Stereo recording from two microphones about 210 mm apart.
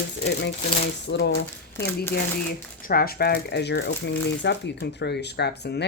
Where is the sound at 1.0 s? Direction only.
55° left (ahead or behind).